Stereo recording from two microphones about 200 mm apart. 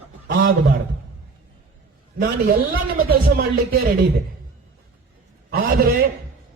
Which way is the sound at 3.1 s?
50° right (ahead or behind).